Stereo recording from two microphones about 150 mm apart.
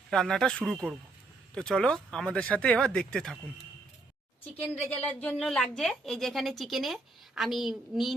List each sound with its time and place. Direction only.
0.1 s a woman's voice: 5° left (ahead or behind)
4.9 s a woman's voice: 10° left (ahead or behind)